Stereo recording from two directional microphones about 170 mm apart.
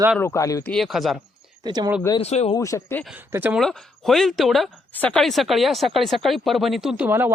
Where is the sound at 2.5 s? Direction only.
20° left (ahead or behind).